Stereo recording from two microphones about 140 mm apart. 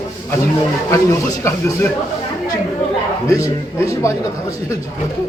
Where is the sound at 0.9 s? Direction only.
20° left (ahead or behind).